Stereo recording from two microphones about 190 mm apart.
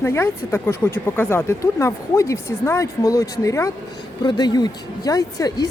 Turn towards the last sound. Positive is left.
turn(degrees=20)  # may be behind; listen again after turning